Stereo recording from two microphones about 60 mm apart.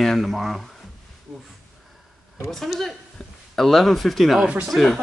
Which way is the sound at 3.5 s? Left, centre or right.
Centre.